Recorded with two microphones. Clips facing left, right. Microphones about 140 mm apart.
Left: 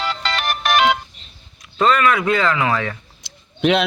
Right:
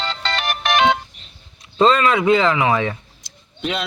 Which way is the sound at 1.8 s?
25° right (ahead or behind).